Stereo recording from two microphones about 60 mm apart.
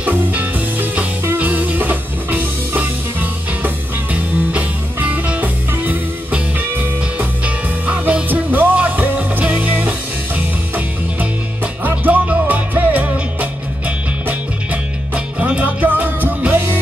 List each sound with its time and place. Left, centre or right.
0.0 s music: right